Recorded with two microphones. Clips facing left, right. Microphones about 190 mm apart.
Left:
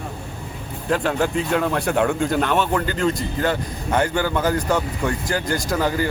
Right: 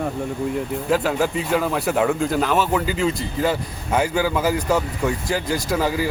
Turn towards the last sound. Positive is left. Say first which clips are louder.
# even
turn(degrees=-5)  # may be behind; listen again after turning